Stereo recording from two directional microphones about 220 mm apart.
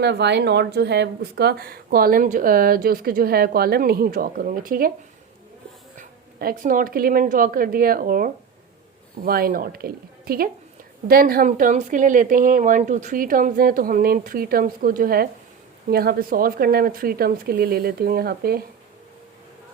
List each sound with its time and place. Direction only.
0.0 s speech: 50° right (ahead or behind)
6.0 s a woman's voice: 40° right (ahead or behind)